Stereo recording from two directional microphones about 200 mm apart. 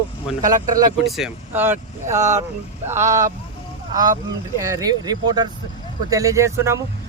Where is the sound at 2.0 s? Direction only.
35° right (ahead or behind).